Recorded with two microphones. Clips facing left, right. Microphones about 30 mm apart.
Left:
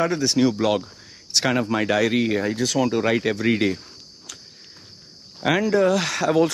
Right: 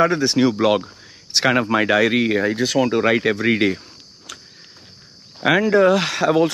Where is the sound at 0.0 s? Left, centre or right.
Centre.